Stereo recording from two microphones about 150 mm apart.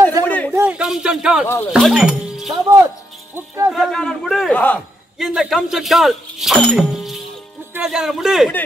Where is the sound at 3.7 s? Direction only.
Centre (ahead or behind).